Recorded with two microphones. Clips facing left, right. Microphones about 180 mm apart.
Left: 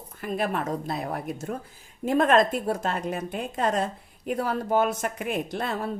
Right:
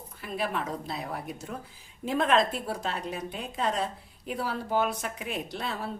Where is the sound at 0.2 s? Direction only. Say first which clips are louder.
Left 4 dB; 50° left (ahead or behind).